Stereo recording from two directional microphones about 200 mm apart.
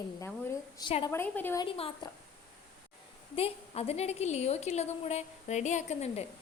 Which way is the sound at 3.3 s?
30° left (ahead or behind).